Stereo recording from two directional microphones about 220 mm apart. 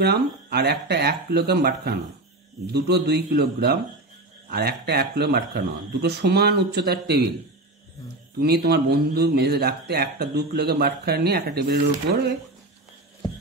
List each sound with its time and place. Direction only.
0.0 s a man's voice: 45° right (ahead or behind)
8.4 s a man's voice: 45° right (ahead or behind)